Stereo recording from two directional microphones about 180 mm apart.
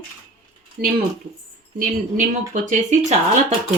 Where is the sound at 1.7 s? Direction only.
50° right (ahead or behind).